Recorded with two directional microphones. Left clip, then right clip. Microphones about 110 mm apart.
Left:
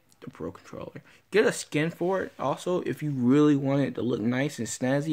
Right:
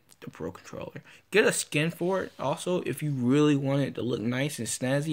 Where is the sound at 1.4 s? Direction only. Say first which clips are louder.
Even; 30° left (ahead or behind).